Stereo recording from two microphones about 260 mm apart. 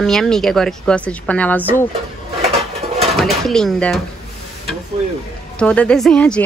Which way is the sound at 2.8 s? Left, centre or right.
Right.